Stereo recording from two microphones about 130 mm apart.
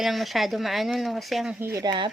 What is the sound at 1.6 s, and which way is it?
Speech, 20° right (ahead or behind).